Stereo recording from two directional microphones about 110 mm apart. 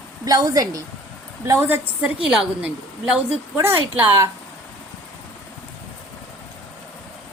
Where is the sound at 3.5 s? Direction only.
20° right (ahead or behind).